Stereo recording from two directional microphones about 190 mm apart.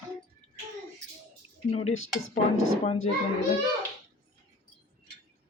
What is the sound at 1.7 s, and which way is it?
Speech, 30° left (ahead or behind).